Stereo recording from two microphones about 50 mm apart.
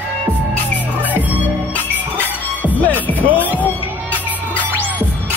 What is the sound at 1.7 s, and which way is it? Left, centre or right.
Music, left.